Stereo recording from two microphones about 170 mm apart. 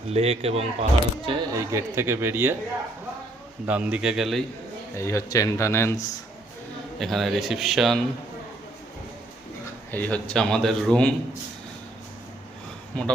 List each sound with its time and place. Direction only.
0.1 s speech: 35° right (ahead or behind)
1.5 s speech: 15° right (ahead or behind)
3.7 s a man's voice: 10° right (ahead or behind)
4.9 s speech: 15° left (ahead or behind)
7.0 s a man's voice: centre (ahead or behind)
9.9 s a man's voice: 10° left (ahead or behind)
12.9 s speech: 5° left (ahead or behind)